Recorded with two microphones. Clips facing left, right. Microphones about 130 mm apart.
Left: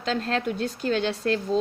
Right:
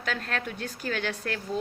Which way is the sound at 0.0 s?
25° left (ahead or behind).